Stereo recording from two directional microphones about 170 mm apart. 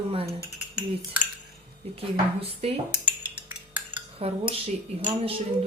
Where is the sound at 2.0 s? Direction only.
35° right (ahead or behind).